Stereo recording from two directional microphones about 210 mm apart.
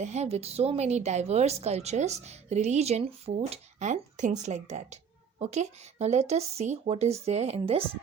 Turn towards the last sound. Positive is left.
turn(degrees=-30)  # may be behind; listen again after turning